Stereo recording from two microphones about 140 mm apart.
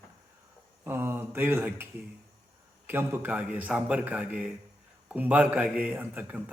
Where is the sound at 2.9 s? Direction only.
15° right (ahead or behind).